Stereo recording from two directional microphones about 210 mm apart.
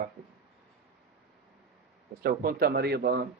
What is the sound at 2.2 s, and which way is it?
Speech, 45° right (ahead or behind).